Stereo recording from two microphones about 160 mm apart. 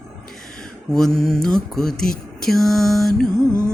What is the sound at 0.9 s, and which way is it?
Mantra, 5° left (ahead or behind).